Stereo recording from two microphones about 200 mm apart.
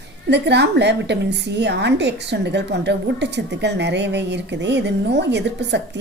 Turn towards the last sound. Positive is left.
turn(degrees=-60)  # may be behind; listen again after turning